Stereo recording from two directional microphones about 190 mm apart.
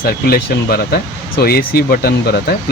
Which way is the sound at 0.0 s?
55° left (ahead or behind).